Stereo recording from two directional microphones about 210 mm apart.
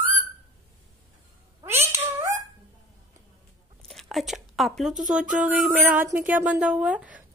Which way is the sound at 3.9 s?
Centre (ahead or behind).